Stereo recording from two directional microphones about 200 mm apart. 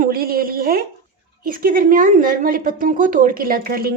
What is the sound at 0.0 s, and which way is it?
Speech, 50° right (ahead or behind).